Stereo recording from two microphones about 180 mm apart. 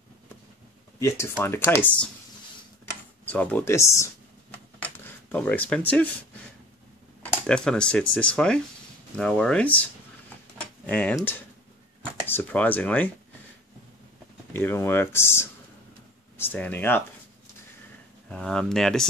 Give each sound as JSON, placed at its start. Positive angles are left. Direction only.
{"t": 0.9, "sound": "speech", "side_deg": 15}
{"t": 3.3, "sound": "speech", "side_deg": 10}
{"t": 4.8, "sound": "a sound", "side_deg": 10}
{"t": 7.4, "sound": "speech", "side_deg": 5}
{"t": 10.6, "sound": "tick-tock", "side_deg": 5}
{"t": 11.1, "sound": "speech", "side_deg": 10}
{"t": 14.5, "sound": "speech", "side_deg": 15}
{"t": 18.3, "sound": "speech", "side_deg": 5}